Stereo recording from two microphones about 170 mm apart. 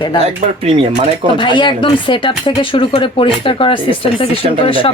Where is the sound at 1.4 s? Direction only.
30° left (ahead or behind).